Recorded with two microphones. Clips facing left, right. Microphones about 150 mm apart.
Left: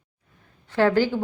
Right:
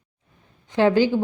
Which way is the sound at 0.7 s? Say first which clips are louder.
Right 2 dB; 20° right (ahead or behind).